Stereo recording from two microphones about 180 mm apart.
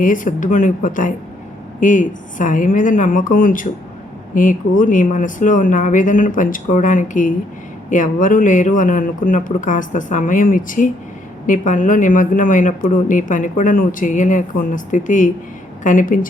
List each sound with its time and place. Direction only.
0.0 s speech: 45° left (ahead or behind)